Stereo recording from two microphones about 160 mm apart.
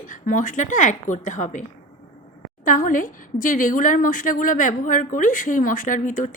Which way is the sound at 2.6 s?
55° left (ahead or behind).